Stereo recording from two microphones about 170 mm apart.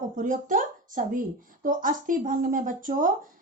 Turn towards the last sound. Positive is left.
turn(degrees=-50)  # may be behind; listen again after turning